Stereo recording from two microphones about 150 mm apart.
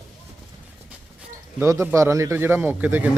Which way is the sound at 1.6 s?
15° right (ahead or behind).